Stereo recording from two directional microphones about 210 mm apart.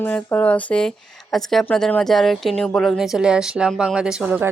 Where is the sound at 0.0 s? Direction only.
10° left (ahead or behind).